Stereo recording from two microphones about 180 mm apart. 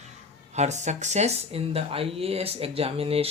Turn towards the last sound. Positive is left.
turn(degrees=-35)  # may be behind; listen again after turning